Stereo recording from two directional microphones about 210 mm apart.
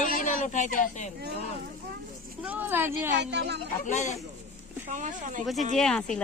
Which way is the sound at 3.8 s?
35° left (ahead or behind).